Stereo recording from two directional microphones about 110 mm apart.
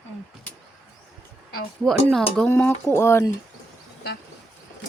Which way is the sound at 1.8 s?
5° left (ahead or behind).